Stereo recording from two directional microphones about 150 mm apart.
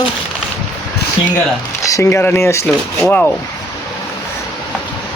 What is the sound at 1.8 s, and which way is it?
Speech, 20° left (ahead or behind).